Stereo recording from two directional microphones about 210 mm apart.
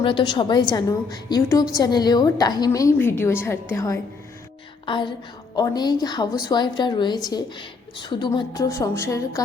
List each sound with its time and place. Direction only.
0.0 s a woman's voice: 25° left (ahead or behind)
4.9 s a woman's voice: 25° left (ahead or behind)